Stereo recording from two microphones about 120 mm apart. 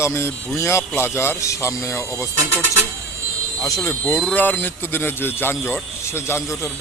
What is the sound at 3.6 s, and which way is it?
A man's voice, 20° left (ahead or behind).